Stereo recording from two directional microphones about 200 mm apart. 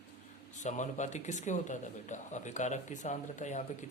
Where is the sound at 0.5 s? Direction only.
35° left (ahead or behind).